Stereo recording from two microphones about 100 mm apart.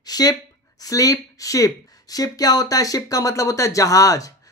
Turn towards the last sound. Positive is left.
turn(degrees=35)  # may be behind; listen again after turning